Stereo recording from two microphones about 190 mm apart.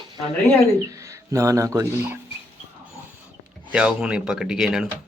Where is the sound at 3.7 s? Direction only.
5° right (ahead or behind).